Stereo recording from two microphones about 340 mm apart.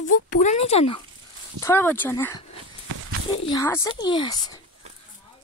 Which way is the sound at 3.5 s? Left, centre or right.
Centre.